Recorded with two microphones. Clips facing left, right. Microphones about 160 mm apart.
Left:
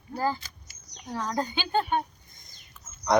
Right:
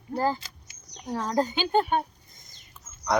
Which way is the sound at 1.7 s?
10° right (ahead or behind).